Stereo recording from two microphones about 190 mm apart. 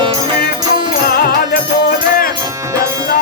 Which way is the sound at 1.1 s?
55° left (ahead or behind).